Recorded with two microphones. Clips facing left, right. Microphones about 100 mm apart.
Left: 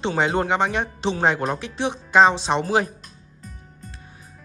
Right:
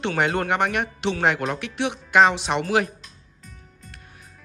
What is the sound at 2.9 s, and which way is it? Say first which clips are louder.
Music: left 3 dB; 40° left (ahead or behind).